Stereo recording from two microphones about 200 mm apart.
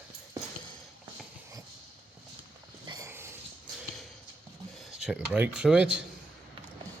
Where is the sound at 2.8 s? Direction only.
15° right (ahead or behind).